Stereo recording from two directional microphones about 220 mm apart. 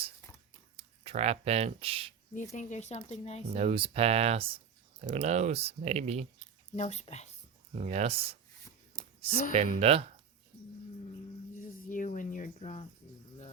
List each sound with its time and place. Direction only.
0.8 s speech: 25° right (ahead or behind)
2.3 s speech: 35° left (ahead or behind)
3.5 s speech: 25° right (ahead or behind)
6.7 s speech: 30° left (ahead or behind)
7.8 s speech: 30° right (ahead or behind)
8.9 s a sound: 15° left (ahead or behind)
9.6 s speech: 25° right (ahead or behind)
11.9 s cricket: 35° left (ahead or behind)